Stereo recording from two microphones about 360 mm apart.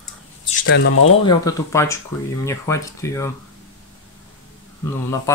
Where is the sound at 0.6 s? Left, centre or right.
Left.